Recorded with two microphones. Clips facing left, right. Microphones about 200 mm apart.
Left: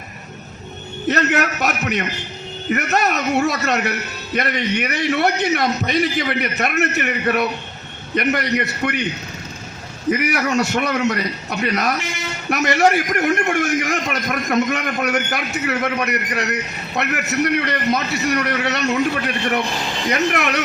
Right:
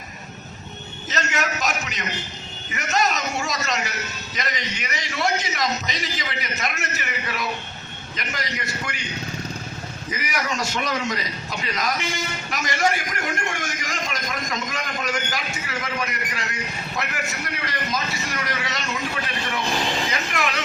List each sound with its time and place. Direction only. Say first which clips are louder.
1.0 s speech: left 8 dB; 60° left (ahead or behind)
10.1 s speech: left 10 dB; 60° left (ahead or behind)